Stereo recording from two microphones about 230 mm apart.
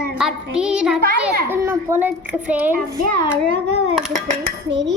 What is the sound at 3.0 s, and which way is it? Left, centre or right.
Speech, right.